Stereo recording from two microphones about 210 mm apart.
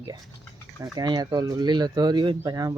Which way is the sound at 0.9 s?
20° right (ahead or behind).